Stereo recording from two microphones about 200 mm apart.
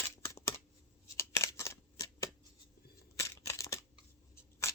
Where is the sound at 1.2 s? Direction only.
15° left (ahead or behind).